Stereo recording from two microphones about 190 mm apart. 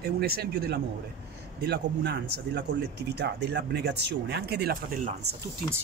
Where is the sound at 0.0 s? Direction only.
55° right (ahead or behind).